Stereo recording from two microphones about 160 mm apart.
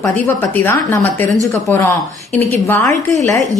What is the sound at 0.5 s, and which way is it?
Speech, 15° left (ahead or behind).